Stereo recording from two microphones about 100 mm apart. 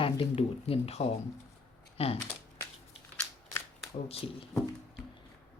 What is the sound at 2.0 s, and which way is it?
Speech, 80° left.